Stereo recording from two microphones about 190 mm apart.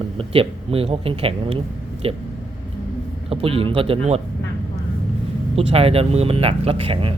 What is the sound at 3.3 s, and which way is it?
Speech, 30° right (ahead or behind).